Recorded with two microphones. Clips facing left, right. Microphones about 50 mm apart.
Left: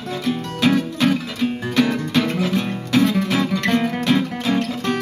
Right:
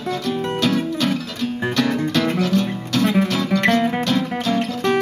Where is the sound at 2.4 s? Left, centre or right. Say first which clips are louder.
Right 2 dB; centre.